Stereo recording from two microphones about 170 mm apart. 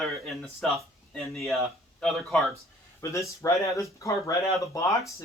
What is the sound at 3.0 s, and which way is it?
Speech, 15° left (ahead or behind).